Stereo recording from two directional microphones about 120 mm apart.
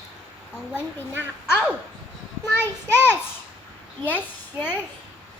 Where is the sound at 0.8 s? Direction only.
15° left (ahead or behind).